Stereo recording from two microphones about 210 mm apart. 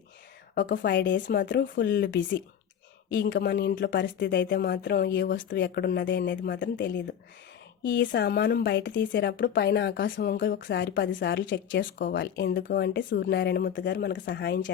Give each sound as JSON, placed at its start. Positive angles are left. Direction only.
{"t": 0.6, "sound": "speech", "side_deg": 55}
{"t": 10.7, "sound": "speech", "side_deg": 55}
{"t": 11.8, "sound": "speech", "side_deg": 40}